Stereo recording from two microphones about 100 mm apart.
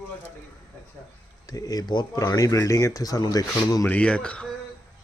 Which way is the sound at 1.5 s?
40° left (ahead or behind).